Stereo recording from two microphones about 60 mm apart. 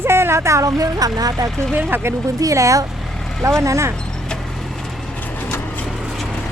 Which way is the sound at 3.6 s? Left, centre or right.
Right.